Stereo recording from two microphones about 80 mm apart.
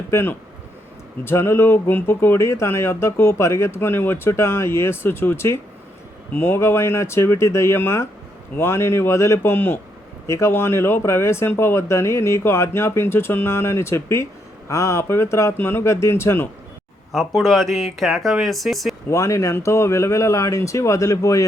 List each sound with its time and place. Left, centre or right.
0.1 s speech: left
17.1 s speech: centre
19.0 s speech: left